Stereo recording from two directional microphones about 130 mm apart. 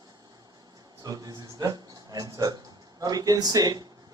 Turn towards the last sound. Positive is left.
turn(degrees=-30)  # may be behind; listen again after turning